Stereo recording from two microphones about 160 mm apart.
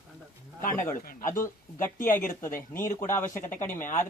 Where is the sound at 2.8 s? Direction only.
15° left (ahead or behind).